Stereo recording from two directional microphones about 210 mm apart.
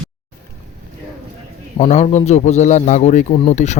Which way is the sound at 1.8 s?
35° left (ahead or behind).